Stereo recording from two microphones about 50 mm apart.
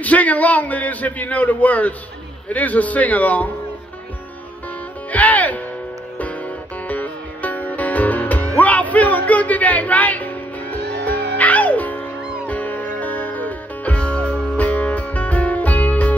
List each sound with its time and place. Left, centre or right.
0.0 s a man's voice: left
5.1 s a man's voice: left
6.9 s music: left